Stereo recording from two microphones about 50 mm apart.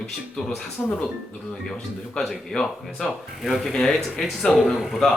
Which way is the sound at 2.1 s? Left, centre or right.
Centre.